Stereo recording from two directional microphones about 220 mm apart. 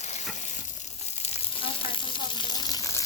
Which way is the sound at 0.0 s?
30° left (ahead or behind).